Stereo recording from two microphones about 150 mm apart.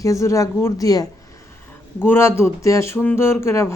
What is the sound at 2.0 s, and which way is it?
Speech, 15° left (ahead or behind).